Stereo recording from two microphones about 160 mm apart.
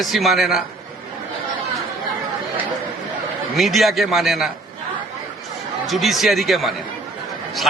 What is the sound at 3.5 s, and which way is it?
Speech, centre (ahead or behind).